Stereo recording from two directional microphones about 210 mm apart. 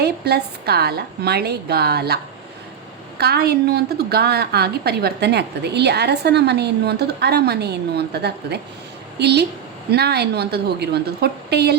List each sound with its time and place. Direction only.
0.0 s a woman's voice: 50° right (ahead or behind)
3.2 s a woman's voice: 50° right (ahead or behind)